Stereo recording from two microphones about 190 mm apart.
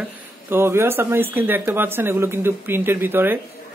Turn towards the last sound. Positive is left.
turn(degrees=-10)  # may be behind; listen again after turning